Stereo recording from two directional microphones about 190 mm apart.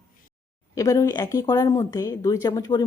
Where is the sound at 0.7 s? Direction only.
20° left (ahead or behind).